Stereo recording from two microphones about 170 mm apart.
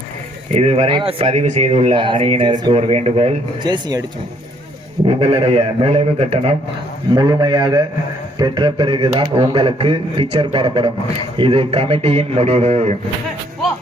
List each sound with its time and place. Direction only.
0.5 s speech: 35° right (ahead or behind)
5.0 s speech: 35° right (ahead or behind)
7.1 s speech: 25° right (ahead or behind); by 13.0 s 40° right (ahead or behind)